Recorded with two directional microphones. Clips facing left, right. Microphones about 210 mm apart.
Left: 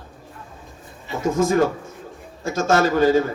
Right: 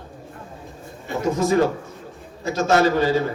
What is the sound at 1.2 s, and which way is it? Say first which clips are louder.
A man's voice: even; 50° left (ahead or behind).